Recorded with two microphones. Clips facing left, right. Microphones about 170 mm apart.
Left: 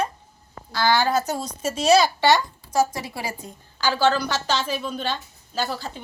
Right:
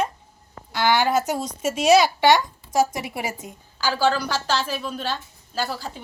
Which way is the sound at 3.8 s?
5° right (ahead or behind).